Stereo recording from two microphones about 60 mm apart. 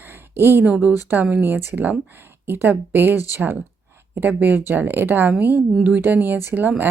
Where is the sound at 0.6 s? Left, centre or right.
Right.